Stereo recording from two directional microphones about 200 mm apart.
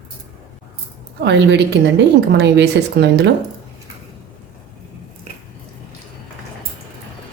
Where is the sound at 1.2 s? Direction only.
60° right (ahead or behind).